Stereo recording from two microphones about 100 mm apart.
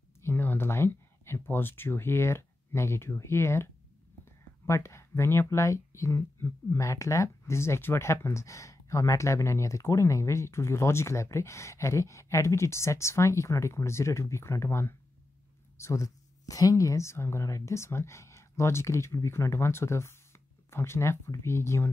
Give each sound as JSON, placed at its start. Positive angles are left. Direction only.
{"t": 0.2, "sound": "speech", "side_deg": 20}